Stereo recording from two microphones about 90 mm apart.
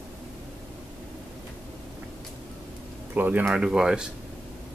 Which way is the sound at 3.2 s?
20° right (ahead or behind).